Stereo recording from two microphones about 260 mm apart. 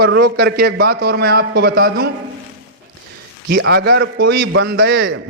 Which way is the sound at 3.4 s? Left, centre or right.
Right.